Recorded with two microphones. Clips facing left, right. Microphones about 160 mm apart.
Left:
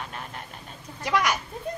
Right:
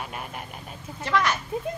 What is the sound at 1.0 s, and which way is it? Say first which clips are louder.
Speech: even; 10° left (ahead or behind).